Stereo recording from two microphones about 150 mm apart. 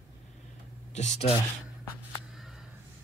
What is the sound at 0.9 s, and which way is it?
Speech, 50° left (ahead or behind).